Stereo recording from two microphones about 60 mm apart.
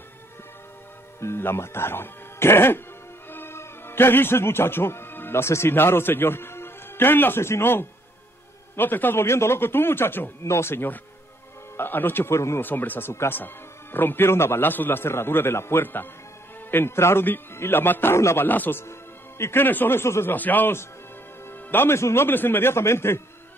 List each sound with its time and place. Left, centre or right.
1.2 s a man's voice: left
10.4 s a man's voice: left
12.4 s a man's voice: left
12.6 s a man's voice: left
13.1 s a man's voice: left
13.9 s a man's voice: left
18.1 s a man's voice: left
18.5 s speech: left
20.3 s a man's voice: left